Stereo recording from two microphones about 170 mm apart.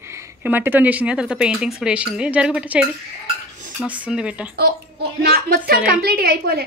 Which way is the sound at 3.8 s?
10° right (ahead or behind).